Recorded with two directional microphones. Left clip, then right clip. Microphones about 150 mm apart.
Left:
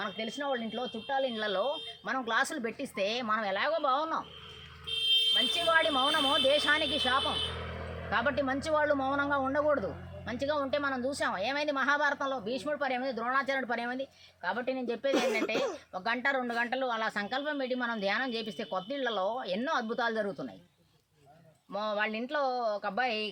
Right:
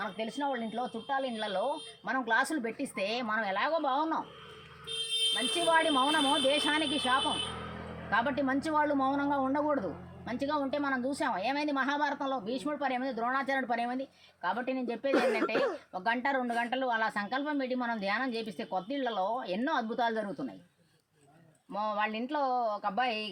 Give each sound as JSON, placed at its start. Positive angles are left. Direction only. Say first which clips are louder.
{"t": 0.0, "sound": "speech", "louder": "right 1 dB", "side_deg": 15}
{"t": 5.2, "sound": "speech", "louder": "left 2 dB", "side_deg": 20}
{"t": 15.1, "sound": "speech", "louder": "right 2 dB", "side_deg": 15}
{"t": 15.9, "sound": "speech", "louder": "even", "side_deg": 25}
{"t": 21.7, "sound": "speech", "louder": "even", "side_deg": 25}